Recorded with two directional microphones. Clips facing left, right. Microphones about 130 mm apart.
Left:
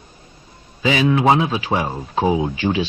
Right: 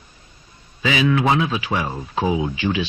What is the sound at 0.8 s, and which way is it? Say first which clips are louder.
Speech: left 2 dB; 35° left (ahead or behind).